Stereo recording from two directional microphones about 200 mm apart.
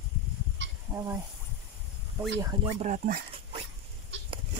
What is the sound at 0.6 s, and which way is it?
Fowl, 65° right (ahead or behind).